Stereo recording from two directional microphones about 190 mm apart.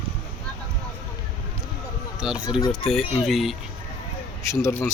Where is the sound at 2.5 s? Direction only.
25° left (ahead or behind).